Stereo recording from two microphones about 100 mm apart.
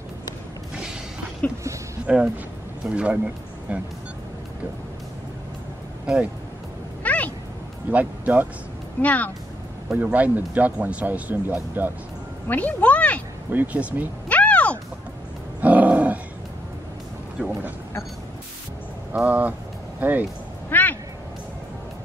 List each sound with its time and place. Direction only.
2.0 s speech: 10° right (ahead or behind)
6.0 s speech: 10° right (ahead or behind)
7.0 s a sound: 15° left (ahead or behind)
7.9 s speech: 15° right (ahead or behind)
9.0 s speech: 15° left (ahead or behind)
9.8 s speech: 15° right (ahead or behind)
12.4 s speech: 15° left (ahead or behind)
13.5 s speech: 15° right (ahead or behind)
14.3 s a sound: 15° left (ahead or behind)
15.6 s dog: 15° right (ahead or behind)
17.4 s speech: 10° right (ahead or behind)
19.2 s speech: 15° right (ahead or behind)
20.7 s a sound: 20° left (ahead or behind)